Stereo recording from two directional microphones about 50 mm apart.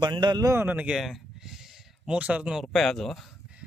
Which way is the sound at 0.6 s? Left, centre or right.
Right.